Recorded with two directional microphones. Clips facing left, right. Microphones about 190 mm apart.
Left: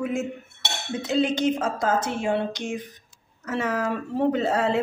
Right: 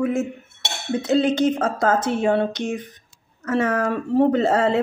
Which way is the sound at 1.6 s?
55° right (ahead or behind).